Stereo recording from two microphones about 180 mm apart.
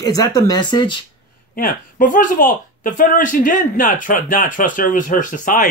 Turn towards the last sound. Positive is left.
turn(degrees=45)  # may be behind; listen again after turning